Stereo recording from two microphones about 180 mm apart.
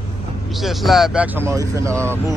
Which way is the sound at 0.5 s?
Centre (ahead or behind).